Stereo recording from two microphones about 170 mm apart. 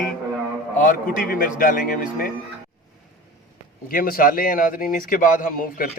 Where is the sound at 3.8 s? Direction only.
60° left (ahead or behind).